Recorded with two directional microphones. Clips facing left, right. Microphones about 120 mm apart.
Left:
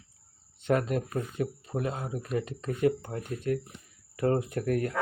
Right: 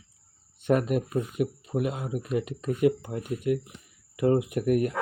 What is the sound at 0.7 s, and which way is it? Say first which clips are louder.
Speech: right 3 dB; 20° right (ahead or behind).